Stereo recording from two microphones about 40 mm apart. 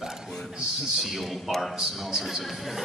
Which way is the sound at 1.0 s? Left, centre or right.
Centre.